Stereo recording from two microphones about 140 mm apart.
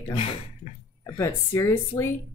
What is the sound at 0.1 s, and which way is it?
Speech, 40° left (ahead or behind).